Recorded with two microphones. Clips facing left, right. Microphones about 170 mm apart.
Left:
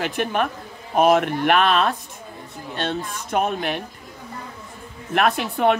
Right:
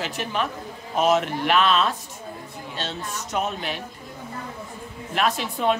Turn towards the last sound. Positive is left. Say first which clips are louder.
# left 4 dB
turn(degrees=60)  # may be behind; listen again after turning